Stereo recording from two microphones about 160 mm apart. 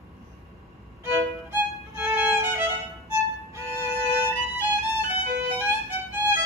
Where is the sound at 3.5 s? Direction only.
15° right (ahead or behind).